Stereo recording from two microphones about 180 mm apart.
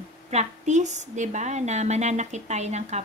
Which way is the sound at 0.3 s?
40° right (ahead or behind).